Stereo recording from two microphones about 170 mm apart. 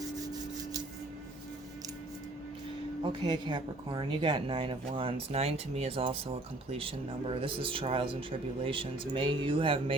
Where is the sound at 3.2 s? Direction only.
25° right (ahead or behind).